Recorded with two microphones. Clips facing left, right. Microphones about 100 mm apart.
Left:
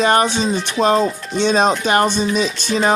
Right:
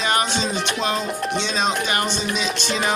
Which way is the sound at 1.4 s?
50° left (ahead or behind).